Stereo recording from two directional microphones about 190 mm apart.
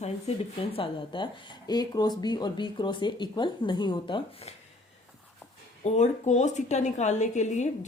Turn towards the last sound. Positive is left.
turn(degrees=40)  # may be behind; listen again after turning